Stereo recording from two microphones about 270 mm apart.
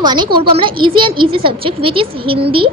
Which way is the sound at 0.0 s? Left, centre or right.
Centre.